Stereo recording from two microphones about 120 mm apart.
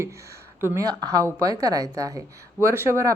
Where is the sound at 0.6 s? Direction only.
25° right (ahead or behind).